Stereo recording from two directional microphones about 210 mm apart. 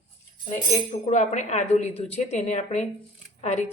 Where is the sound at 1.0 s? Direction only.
35° left (ahead or behind).